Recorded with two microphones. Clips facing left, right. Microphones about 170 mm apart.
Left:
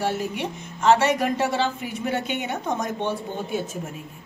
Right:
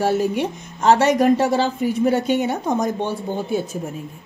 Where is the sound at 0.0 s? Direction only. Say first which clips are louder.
Right 7 dB; 40° right (ahead or behind).